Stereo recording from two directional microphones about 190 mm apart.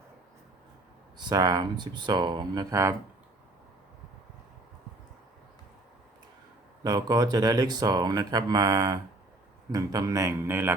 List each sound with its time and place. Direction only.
1.2 s speech: 20° right (ahead or behind)
6.8 s a man's voice: 20° right (ahead or behind)